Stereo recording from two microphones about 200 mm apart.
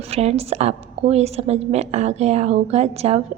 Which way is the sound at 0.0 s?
30° right (ahead or behind).